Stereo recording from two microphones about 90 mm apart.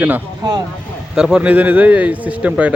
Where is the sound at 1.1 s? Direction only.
10° right (ahead or behind).